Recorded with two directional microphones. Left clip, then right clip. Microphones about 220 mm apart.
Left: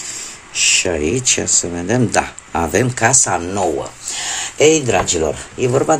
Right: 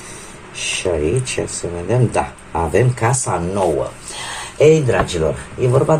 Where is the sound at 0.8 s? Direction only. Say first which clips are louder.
Left 1 dB; 40° left (ahead or behind).